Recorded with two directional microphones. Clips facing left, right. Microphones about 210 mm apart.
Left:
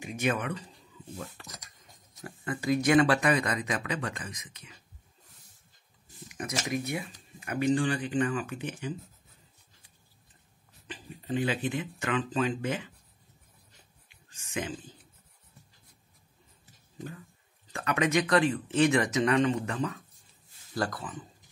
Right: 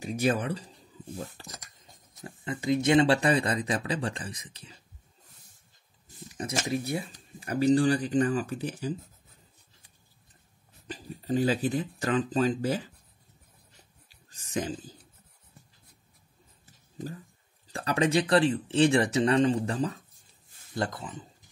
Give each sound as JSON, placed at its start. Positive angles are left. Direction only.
{"t": 0.0, "sound": "speech", "side_deg": -35}
{"t": 2.2, "sound": "speech", "side_deg": -20}
{"t": 6.2, "sound": "speech", "side_deg": -30}
{"t": 10.9, "sound": "speech", "side_deg": -40}
{"t": 14.0, "sound": "a sound", "side_deg": -35}
{"t": 17.7, "sound": "speech", "side_deg": -30}
{"t": 20.7, "sound": "speech", "side_deg": -25}